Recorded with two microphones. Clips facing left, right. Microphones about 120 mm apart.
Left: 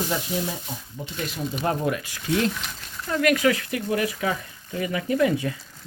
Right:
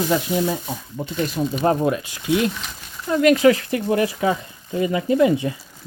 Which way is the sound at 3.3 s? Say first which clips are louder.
Right 7 dB; 30° right (ahead or behind).